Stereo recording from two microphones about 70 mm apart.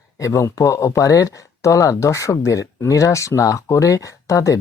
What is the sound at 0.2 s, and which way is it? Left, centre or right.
Speech, left.